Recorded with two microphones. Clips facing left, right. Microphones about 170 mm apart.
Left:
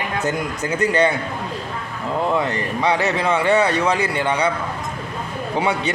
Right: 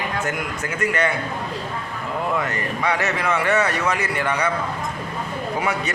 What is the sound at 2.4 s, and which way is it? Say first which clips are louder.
A man's voice: left 3 dB; 30° left (ahead or behind).